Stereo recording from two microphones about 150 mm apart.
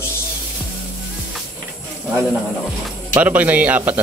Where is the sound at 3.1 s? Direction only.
10° right (ahead or behind).